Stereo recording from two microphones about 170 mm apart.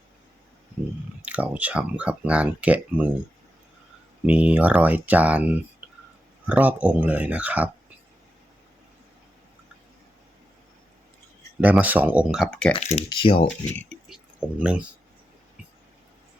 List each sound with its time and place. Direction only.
1.2 s speech: 10° right (ahead or behind)
4.3 s speech: 10° right (ahead or behind)
6.5 s speech: 10° right (ahead or behind)
11.6 s speech: 10° right (ahead or behind)
12.7 s speech: 40° left (ahead or behind)
13.7 s a sound: 5° left (ahead or behind)
14.6 s speech: 5° right (ahead or behind)